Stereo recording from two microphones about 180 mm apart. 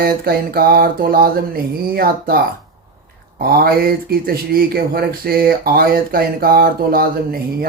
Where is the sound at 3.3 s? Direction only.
55° right (ahead or behind).